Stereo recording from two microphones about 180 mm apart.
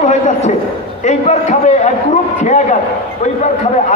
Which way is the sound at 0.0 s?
40° left (ahead or behind).